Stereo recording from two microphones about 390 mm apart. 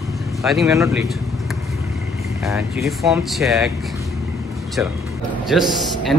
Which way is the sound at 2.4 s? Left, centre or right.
Centre.